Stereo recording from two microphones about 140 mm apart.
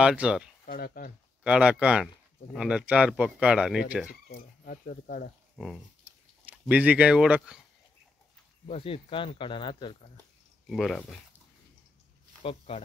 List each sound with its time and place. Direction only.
0.0 s speech: 5° right (ahead or behind)
0.7 s speech: 90° left
1.4 s speech: 10° right (ahead or behind)
4.3 s speech: 90° left
6.7 s speech: 10° right (ahead or behind)
8.6 s speech: 45° left (ahead or behind)
10.7 s speech: centre (ahead or behind)
12.4 s speech: 45° left (ahead or behind)